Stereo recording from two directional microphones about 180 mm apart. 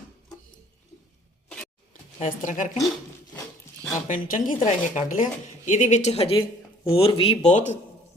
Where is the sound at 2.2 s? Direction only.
45° left (ahead or behind).